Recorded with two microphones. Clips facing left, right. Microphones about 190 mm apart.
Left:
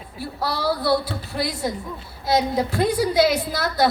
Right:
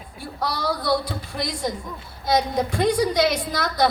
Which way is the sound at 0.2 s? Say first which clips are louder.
Left 2 dB; 5° left (ahead or behind).